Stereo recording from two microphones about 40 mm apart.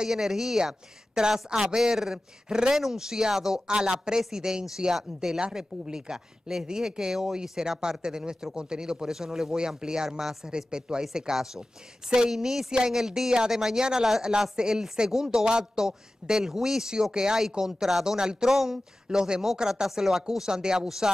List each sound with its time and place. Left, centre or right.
0.0 s speech: centre
10.0 s speech: centre
10.5 s speech: centre
18.5 s speech: centre
19.0 s speech: centre